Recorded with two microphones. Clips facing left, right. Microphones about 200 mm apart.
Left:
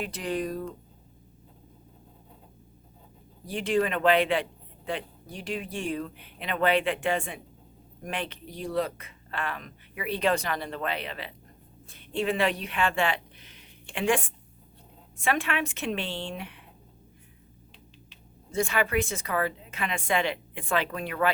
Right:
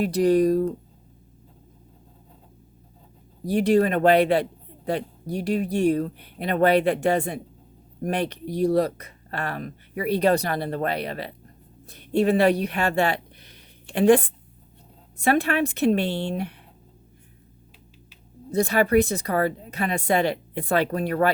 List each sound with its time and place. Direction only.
0.0 s speech: 40° right (ahead or behind)
3.4 s speech: 40° right (ahead or behind)
18.5 s speech: 35° right (ahead or behind)